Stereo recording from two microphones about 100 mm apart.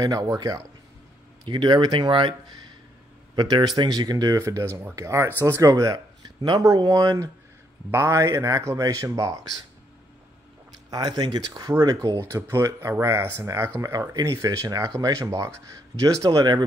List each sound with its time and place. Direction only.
0.0 s speech: 40° right (ahead or behind)
1.4 s speech: 50° right (ahead or behind)
3.3 s speech: 45° right (ahead or behind)
4.4 s speech: 30° right (ahead or behind)
10.9 s speech: 40° right (ahead or behind)